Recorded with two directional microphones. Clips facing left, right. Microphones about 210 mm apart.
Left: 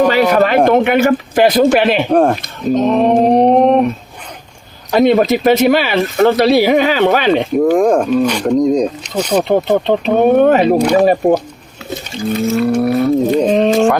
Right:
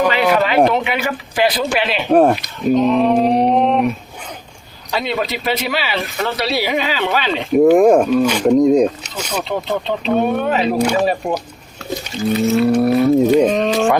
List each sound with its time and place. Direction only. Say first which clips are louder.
0.1 s speech: left 4 dB; 40° left (ahead or behind)
2.0 s speech: even; 5° right (ahead or behind)
2.4 s speech: even; 45° left (ahead or behind)
4.9 s speech: left 11 dB; 50° left (ahead or behind)
7.5 s speech: right 5 dB; 5° right (ahead or behind)
9.4 s speech: left 7 dB; 50° left (ahead or behind)
12.5 s speech: even; centre (ahead or behind)
13.5 s speech: left 5 dB; 25° left (ahead or behind)